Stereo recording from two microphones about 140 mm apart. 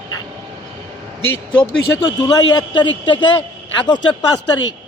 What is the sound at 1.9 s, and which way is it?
A man's voice, 25° left (ahead or behind).